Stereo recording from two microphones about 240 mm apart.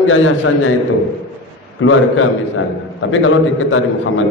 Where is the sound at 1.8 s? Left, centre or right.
Left.